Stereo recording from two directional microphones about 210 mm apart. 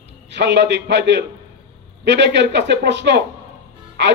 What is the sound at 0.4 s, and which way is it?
A man's voice, 55° right (ahead or behind).